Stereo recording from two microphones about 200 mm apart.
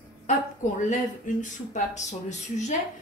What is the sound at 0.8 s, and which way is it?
A woman's voice, 40° left (ahead or behind).